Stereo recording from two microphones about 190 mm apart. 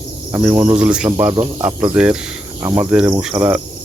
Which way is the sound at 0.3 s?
15° right (ahead or behind).